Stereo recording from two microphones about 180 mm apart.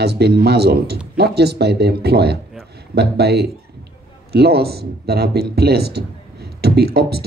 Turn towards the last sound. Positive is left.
turn(degrees=-60)  # may be behind; listen again after turning